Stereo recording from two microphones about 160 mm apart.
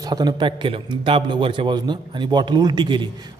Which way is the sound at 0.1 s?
25° right (ahead or behind).